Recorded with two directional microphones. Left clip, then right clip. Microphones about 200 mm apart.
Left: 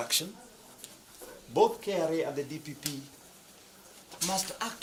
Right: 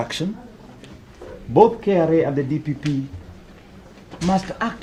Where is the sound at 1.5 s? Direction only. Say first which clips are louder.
Right 12 dB; 30° left (ahead or behind).